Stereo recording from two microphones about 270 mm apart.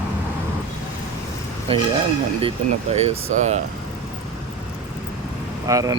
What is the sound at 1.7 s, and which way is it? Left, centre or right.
Speech, centre.